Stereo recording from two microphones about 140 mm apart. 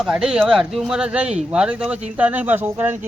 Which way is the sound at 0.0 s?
5° right (ahead or behind).